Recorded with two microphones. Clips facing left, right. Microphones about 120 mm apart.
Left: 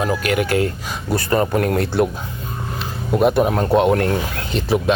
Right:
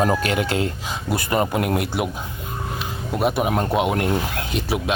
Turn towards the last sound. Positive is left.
turn(degrees=-10)  # may be behind; listen again after turning